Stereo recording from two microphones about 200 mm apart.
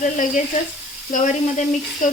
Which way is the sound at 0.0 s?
40° left (ahead or behind).